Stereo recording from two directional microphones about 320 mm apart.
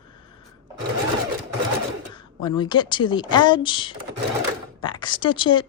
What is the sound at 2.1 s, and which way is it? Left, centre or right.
Speech, centre.